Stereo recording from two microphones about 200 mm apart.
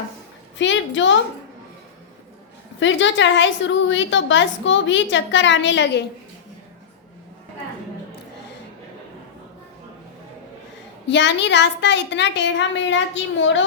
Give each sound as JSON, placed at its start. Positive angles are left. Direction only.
{"t": 0.6, "sound": "a woman's voice", "side_deg": 65}
{"t": 2.8, "sound": "a woman's voice", "side_deg": 65}
{"t": 11.1, "sound": "a woman's voice", "side_deg": 60}